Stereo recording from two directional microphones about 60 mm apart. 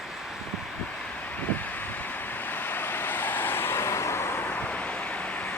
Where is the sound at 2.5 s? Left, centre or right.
Left.